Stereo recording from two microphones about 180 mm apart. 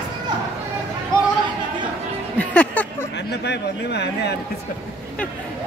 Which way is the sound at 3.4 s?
70° left (ahead or behind).